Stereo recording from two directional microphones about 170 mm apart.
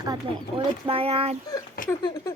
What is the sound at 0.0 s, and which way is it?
Speech, 25° right (ahead or behind).